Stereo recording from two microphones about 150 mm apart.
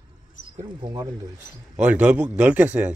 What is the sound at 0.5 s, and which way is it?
Speech, 25° right (ahead or behind).